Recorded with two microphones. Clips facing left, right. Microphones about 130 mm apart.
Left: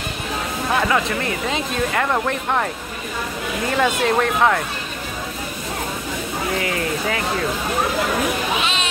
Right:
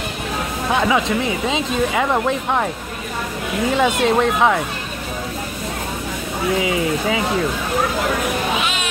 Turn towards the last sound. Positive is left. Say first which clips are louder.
# right 3 dB
turn(degrees=-10)  # may be behind; listen again after turning